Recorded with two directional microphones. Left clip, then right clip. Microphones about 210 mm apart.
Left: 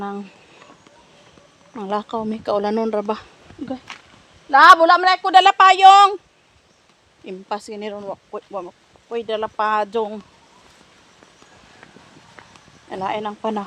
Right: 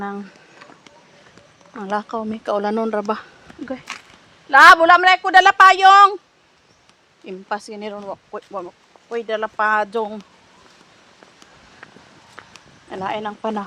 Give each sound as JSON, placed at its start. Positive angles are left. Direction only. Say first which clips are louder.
{"t": 0.0, "sound": "speech", "louder": "even", "side_deg": 10}
{"t": 1.7, "sound": "speech", "louder": "even", "side_deg": 10}
{"t": 3.9, "sound": "a sound", "louder": "right 4 dB", "side_deg": -60}
{"t": 4.4, "sound": "a woman's voice", "louder": "right 1 dB", "side_deg": 0}
{"t": 7.3, "sound": "speech", "louder": "right 1 dB", "side_deg": 5}
{"t": 12.9, "sound": "speech", "louder": "left 1 dB", "side_deg": 10}